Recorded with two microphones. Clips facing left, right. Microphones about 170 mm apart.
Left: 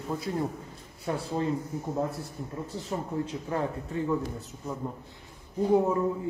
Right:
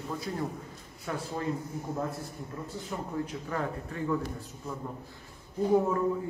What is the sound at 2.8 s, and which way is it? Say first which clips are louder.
A man's voice: left 3 dB; 25° left (ahead or behind).